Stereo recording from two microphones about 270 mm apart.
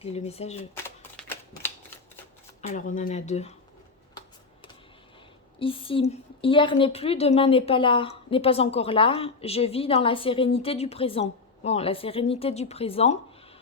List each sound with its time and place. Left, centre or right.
0.0 s a woman's voice: left
1.1 s typewriter: centre
2.6 s a woman's voice: left
5.5 s a woman's voice: centre